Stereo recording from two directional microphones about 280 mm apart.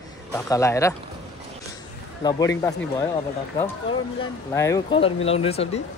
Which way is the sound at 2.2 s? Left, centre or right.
Centre.